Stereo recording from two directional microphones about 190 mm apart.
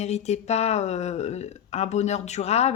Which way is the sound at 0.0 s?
35° left (ahead or behind).